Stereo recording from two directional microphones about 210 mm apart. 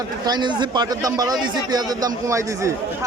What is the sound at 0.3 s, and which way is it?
A man's voice, 20° right (ahead or behind).